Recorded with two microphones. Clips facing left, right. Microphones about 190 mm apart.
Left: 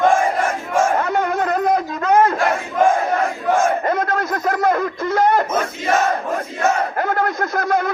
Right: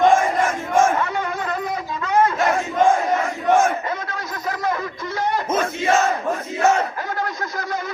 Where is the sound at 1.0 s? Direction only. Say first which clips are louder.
Left 5 dB; 50° left (ahead or behind).